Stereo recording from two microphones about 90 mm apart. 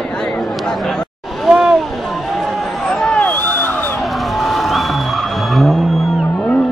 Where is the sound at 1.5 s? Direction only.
5° right (ahead or behind).